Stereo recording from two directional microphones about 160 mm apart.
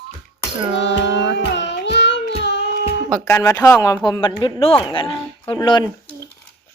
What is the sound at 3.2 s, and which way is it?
Speech, 20° left (ahead or behind).